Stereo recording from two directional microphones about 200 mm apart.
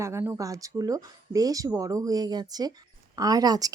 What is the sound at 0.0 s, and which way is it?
Speech, 15° right (ahead or behind).